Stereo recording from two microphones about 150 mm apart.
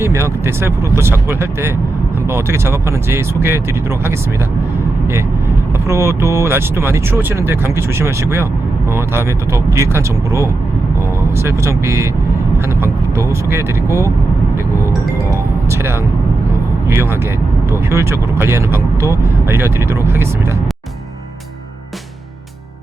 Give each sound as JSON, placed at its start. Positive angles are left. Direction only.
{"t": 0.0, "sound": "speech", "side_deg": -15}
{"t": 5.9, "sound": "speech", "side_deg": -15}
{"t": 15.3, "sound": "music", "side_deg": -15}
{"t": 16.9, "sound": "speech", "side_deg": -15}